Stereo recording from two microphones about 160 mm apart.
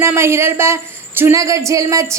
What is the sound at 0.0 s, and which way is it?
A woman's voice, 15° right (ahead or behind).